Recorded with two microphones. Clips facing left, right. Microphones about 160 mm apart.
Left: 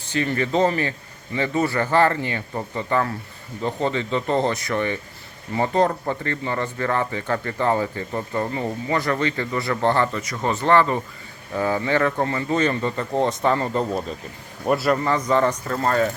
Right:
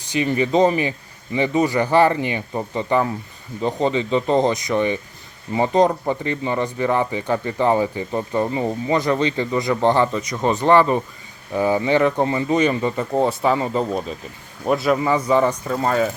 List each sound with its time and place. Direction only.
0.0 s a man's voice: 15° right (ahead or behind); by 15.0 s centre (ahead or behind)
15.0 s speech: 10° right (ahead or behind)